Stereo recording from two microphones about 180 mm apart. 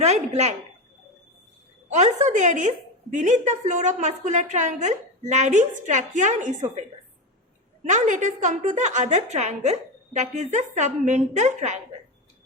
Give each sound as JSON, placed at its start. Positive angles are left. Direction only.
{"t": 0.0, "sound": "a woman's voice", "side_deg": -40}
{"t": 1.9, "sound": "a woman's voice", "side_deg": -40}
{"t": 7.9, "sound": "a woman's voice", "side_deg": -45}